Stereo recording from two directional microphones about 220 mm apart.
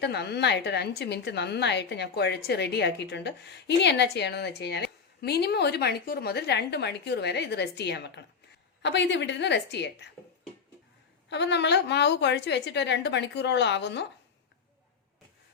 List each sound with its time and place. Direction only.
0.0 s a woman's voice: 50° left (ahead or behind)
11.3 s a woman's voice: 50° left (ahead or behind)